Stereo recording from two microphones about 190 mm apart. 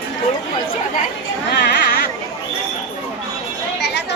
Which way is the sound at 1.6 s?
60° left (ahead or behind).